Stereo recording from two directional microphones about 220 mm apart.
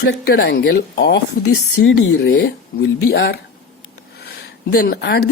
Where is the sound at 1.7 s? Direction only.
65° left (ahead or behind).